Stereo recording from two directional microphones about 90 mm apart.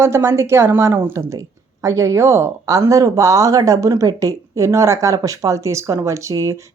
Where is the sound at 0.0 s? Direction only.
30° right (ahead or behind).